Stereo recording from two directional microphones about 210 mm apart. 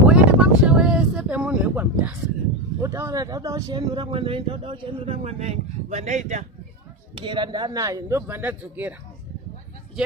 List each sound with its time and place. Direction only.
0.1 s a sound: 5° right (ahead or behind)
2.8 s speech: 15° right (ahead or behind); by 6.4 s 35° right (ahead or behind)
7.2 s speech: 25° right (ahead or behind); by 9.0 s 5° right (ahead or behind)